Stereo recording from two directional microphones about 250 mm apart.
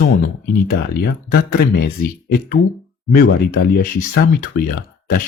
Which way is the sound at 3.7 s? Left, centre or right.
Left.